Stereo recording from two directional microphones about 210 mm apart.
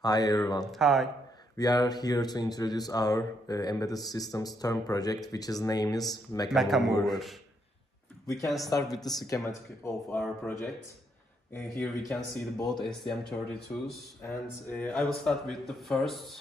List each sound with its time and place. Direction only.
0.0 s speech: 20° left (ahead or behind)
0.7 s speech: centre (ahead or behind)
1.6 s a man's voice: 15° left (ahead or behind)
6.5 s speech: centre (ahead or behind)
6.9 s a man's voice: 15° left (ahead or behind)
8.6 s a man's voice: 15° left (ahead or behind)
10.1 s a man's voice: centre (ahead or behind)
12.0 s speech: centre (ahead or behind)